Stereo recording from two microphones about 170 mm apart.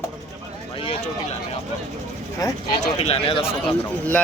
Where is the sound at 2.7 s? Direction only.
35° left (ahead or behind).